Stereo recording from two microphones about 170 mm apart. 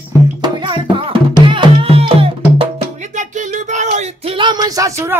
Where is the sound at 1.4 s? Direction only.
30° right (ahead or behind).